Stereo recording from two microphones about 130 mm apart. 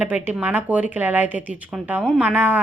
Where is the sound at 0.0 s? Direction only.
15° right (ahead or behind).